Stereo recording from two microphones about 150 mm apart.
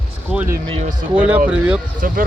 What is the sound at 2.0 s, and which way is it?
Speech, 65° right (ahead or behind).